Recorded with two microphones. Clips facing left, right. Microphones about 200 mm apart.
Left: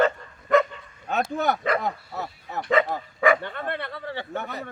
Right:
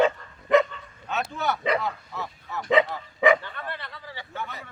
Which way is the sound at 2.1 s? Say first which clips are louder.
Left 2 dB; 40° left (ahead or behind).